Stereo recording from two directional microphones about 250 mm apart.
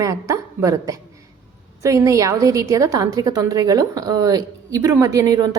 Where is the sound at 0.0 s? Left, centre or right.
Centre.